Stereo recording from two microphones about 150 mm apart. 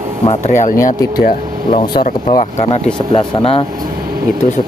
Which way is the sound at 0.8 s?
70° left (ahead or behind).